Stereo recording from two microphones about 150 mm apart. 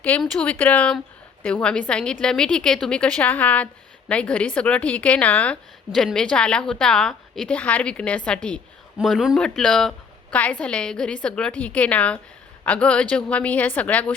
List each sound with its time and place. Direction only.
0.2 s a woman's voice: 10° left (ahead or behind)